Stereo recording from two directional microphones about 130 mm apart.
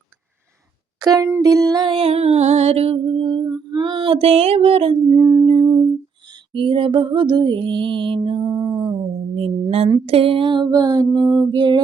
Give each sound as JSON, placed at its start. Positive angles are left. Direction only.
{"t": 0.9, "sound": "speech", "side_deg": -30}
{"t": 1.4, "sound": "music", "side_deg": -30}
{"t": 5.0, "sound": "music", "side_deg": -30}
{"t": 5.5, "sound": "humming", "side_deg": -40}
{"t": 6.5, "sound": "music", "side_deg": -40}
{"t": 8.7, "sound": "a sound", "side_deg": -30}
{"t": 9.3, "sound": "mantra", "side_deg": -45}
{"t": 10.1, "sound": "music", "side_deg": -45}